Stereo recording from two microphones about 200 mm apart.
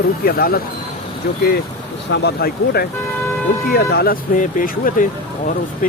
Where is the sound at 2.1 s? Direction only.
55° left (ahead or behind).